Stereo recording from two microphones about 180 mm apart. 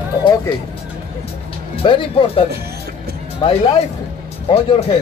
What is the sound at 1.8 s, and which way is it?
Speech, 30° left (ahead or behind).